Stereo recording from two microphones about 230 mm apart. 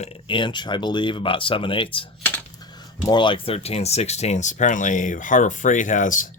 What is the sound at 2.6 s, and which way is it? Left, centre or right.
Cutlery, centre.